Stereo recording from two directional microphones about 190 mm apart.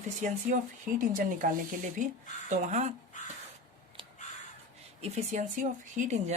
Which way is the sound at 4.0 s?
25° right (ahead or behind).